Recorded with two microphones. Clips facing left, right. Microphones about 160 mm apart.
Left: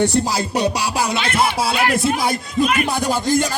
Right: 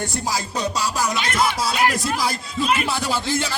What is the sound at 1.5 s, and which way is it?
Speech, 60° left (ahead or behind).